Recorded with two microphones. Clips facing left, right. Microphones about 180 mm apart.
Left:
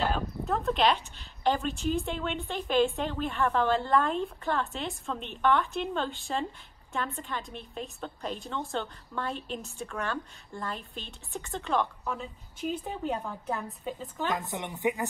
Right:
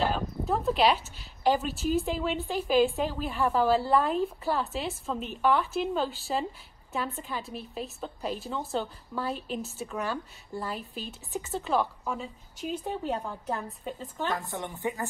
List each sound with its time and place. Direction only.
0.0 s speech: centre (ahead or behind)
14.3 s a woman's voice: 20° left (ahead or behind)